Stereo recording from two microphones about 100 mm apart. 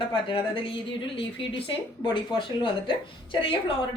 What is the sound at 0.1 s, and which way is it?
Speech, 55° left (ahead or behind).